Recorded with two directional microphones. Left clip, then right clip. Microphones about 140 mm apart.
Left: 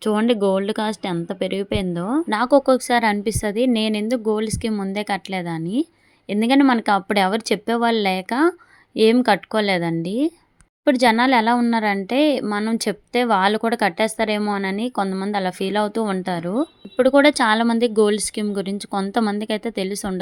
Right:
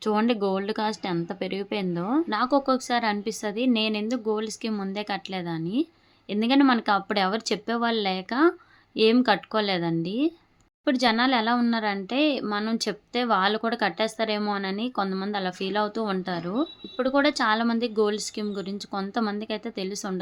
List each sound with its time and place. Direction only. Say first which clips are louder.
0.0 s speech: left 5 dB; 35° left (ahead or behind)
2.3 s speech: left 9 dB; 45° left (ahead or behind)